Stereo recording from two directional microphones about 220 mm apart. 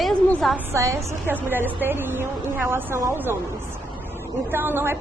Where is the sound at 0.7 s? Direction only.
15° right (ahead or behind).